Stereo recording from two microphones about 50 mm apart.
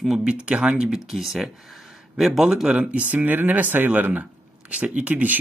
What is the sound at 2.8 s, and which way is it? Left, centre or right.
Speech, right.